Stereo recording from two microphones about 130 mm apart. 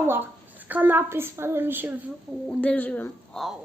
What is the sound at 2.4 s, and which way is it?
Speech, 10° left (ahead or behind).